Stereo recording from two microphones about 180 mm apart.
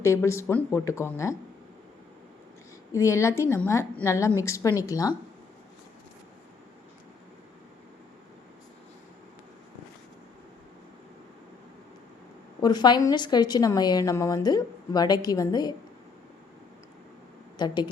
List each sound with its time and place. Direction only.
0.0 s a woman's voice: 15° left (ahead or behind)
2.9 s a woman's voice: 15° left (ahead or behind)
12.6 s a woman's voice: 25° left (ahead or behind)
17.6 s a woman's voice: 25° left (ahead or behind)